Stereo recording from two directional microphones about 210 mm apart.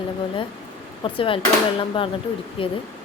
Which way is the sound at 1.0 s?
25° left (ahead or behind).